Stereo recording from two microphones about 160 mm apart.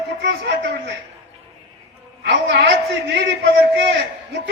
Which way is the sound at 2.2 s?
90° right.